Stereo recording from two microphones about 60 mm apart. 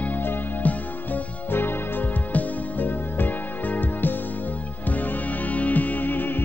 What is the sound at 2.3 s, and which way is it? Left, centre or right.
Music, left.